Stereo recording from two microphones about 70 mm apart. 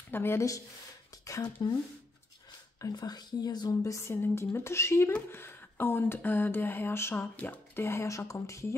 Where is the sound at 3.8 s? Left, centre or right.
Left.